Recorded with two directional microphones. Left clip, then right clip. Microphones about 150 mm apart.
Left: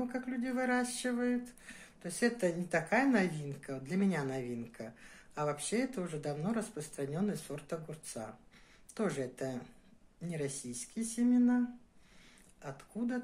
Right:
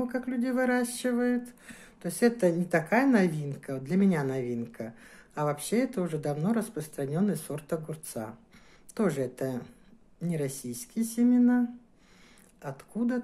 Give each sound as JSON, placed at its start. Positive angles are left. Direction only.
{"t": 0.0, "sound": "speech", "side_deg": -30}
{"t": 12.6, "sound": "speech", "side_deg": -35}